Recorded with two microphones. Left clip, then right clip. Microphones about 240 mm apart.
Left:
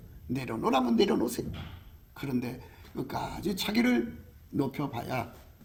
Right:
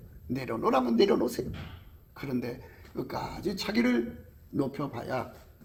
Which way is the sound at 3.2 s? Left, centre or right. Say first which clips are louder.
Left 1 dB; left.